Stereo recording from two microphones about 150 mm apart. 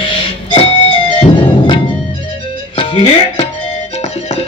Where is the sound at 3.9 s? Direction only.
45° left (ahead or behind).